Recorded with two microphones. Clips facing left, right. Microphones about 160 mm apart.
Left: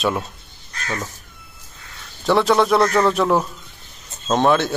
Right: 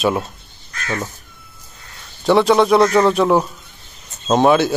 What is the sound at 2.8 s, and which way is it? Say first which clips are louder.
Speech: right 3 dB; 15° right (ahead or behind).